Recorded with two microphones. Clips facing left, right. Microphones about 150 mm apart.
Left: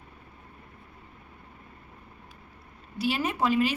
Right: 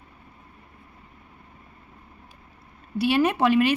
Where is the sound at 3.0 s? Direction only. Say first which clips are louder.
Right 6 dB; 65° right (ahead or behind).